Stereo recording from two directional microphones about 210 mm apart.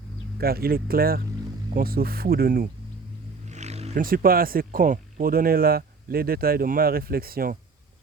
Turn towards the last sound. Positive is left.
turn(degrees=-45)  # may be behind; listen again after turning